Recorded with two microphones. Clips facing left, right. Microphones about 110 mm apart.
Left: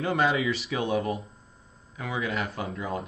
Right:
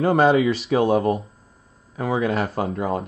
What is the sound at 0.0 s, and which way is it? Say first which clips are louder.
Speech: right 9 dB; 35° right (ahead or behind).